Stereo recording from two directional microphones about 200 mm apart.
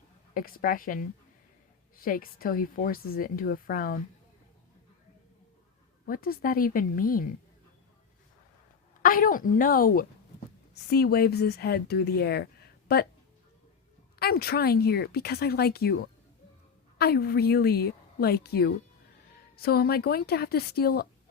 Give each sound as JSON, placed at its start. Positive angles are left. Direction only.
{"t": 0.3, "sound": "speech", "side_deg": 45}
{"t": 6.1, "sound": "speech", "side_deg": 45}
{"t": 9.0, "sound": "speech", "side_deg": 45}
{"t": 14.2, "sound": "speech", "side_deg": 50}
{"t": 17.0, "sound": "speech", "side_deg": 50}